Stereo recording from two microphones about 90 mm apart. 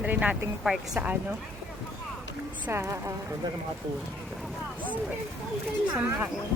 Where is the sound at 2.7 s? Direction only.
30° right (ahead or behind).